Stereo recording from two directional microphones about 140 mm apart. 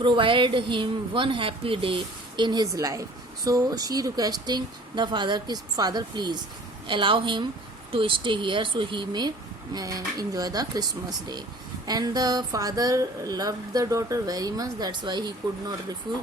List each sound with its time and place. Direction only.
0.0 s speech: 35° right (ahead or behind)
11.9 s speech: 30° right (ahead or behind)